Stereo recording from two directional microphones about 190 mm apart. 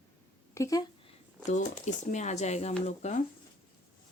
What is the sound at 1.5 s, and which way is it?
Speech, 40° left (ahead or behind).